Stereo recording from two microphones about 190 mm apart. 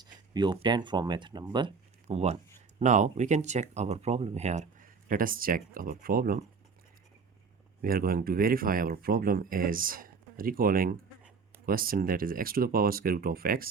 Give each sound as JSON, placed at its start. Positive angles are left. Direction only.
{"t": 0.0, "sound": "speech", "side_deg": -25}
{"t": 2.0, "sound": "speech", "side_deg": -35}
{"t": 7.8, "sound": "speech", "side_deg": -50}